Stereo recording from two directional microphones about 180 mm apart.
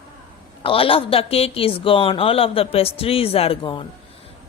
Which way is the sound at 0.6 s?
30° left (ahead or behind).